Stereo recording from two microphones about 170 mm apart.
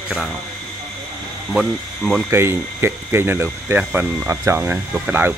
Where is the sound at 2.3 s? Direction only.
15° right (ahead or behind).